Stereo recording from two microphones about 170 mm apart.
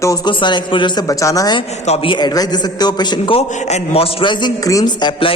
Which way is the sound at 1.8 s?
35° left (ahead or behind).